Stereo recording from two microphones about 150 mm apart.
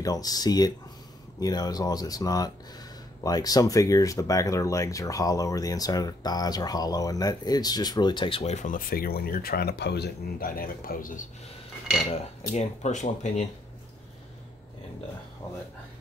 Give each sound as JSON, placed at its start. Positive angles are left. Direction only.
{"t": 0.0, "sound": "speech", "side_deg": 25}
{"t": 8.5, "sound": "speech", "side_deg": 65}
{"t": 12.2, "sound": "speech", "side_deg": 50}